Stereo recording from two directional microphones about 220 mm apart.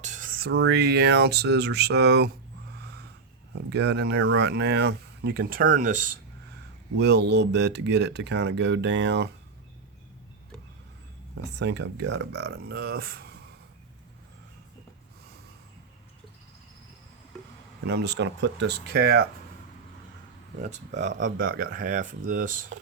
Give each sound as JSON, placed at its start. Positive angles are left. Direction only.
{"t": 0.0, "sound": "speech", "side_deg": -35}
{"t": 2.7, "sound": "a sound", "side_deg": -50}
{"t": 3.7, "sound": "speech", "side_deg": -50}
{"t": 6.9, "sound": "speech", "side_deg": -50}
{"t": 11.5, "sound": "speech", "side_deg": -50}
{"t": 17.8, "sound": "speech", "side_deg": -50}
{"t": 20.6, "sound": "speech", "side_deg": -30}